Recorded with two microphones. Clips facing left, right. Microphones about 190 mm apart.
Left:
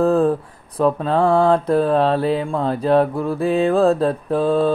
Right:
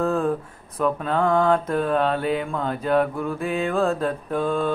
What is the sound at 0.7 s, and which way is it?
Speech, 35° left (ahead or behind).